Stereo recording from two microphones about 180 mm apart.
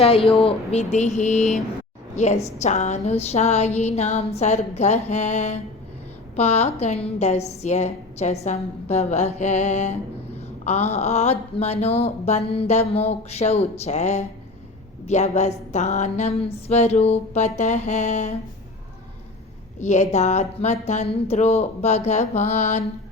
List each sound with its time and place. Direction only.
0.0 s speech: 30° left (ahead or behind)
19.8 s speech: 40° left (ahead or behind)